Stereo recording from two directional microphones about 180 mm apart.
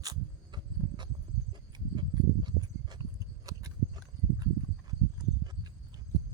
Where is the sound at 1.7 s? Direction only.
25° right (ahead or behind).